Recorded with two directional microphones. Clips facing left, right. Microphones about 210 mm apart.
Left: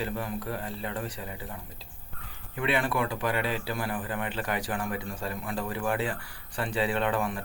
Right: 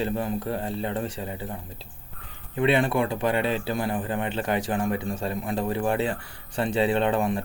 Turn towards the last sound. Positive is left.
turn(degrees=-25)  # may be behind; listen again after turning